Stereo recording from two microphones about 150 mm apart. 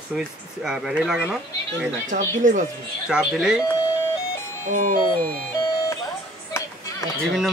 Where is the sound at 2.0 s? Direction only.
55° right (ahead or behind).